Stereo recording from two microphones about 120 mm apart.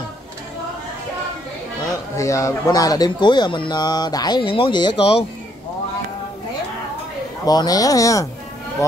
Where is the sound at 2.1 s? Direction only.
25° left (ahead or behind).